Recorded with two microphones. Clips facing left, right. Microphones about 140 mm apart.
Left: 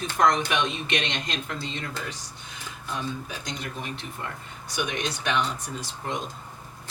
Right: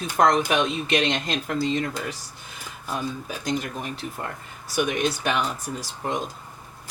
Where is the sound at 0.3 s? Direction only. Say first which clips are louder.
Right 3 dB; 35° right (ahead or behind).